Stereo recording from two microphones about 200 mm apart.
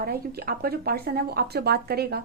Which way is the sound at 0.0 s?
50° right (ahead or behind).